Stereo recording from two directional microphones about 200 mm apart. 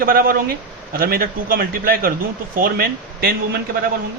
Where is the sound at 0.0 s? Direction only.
45° right (ahead or behind).